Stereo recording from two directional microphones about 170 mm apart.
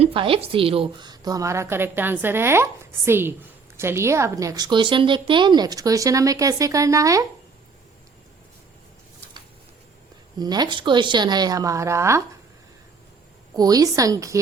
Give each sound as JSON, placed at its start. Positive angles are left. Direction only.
{"t": 0.0, "sound": "a woman's voice", "side_deg": -30}
{"t": 10.3, "sound": "a woman's voice", "side_deg": -25}
{"t": 13.6, "sound": "a woman's voice", "side_deg": -20}